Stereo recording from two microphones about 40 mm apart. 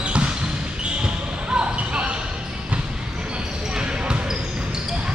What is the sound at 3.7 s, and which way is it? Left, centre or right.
Basketball bounce, right.